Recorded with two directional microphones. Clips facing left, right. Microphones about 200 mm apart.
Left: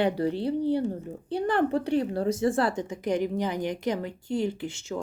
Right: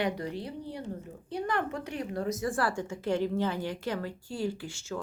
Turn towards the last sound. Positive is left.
turn(degrees=20)  # may be behind; listen again after turning